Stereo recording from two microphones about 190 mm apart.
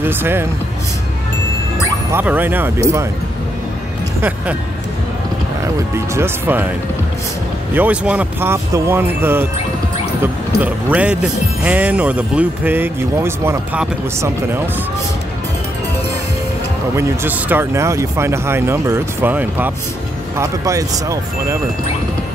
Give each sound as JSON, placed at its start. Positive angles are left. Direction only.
{"t": 0.0, "sound": "speech", "side_deg": -10}
{"t": 2.1, "sound": "speech", "side_deg": -10}
{"t": 5.9, "sound": "speech", "side_deg": -15}
{"t": 7.7, "sound": "speech", "side_deg": -10}
{"t": 16.9, "sound": "speech", "side_deg": -10}